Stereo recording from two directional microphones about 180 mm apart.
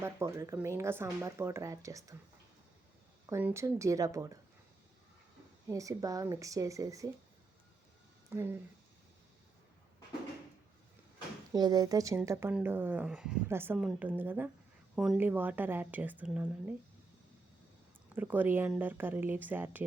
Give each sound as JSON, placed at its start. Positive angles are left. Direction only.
{"t": 0.0, "sound": "speech", "side_deg": -15}
{"t": 3.2, "sound": "speech", "side_deg": -15}
{"t": 5.6, "sound": "speech", "side_deg": -20}
{"t": 8.3, "sound": "speech", "side_deg": -15}
{"t": 11.5, "sound": "speech", "side_deg": -20}
{"t": 18.1, "sound": "speech", "side_deg": -10}